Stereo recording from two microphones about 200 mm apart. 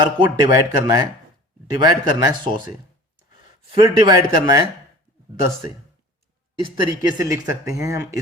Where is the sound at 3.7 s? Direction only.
25° right (ahead or behind).